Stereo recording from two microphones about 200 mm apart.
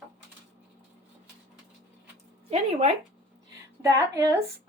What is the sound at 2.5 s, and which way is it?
Speech, 30° right (ahead or behind).